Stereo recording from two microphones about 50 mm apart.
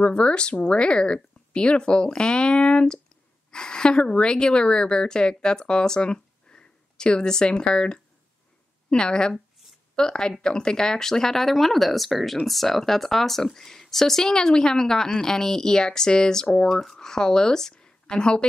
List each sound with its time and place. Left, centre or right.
0.0 s a woman's voice: left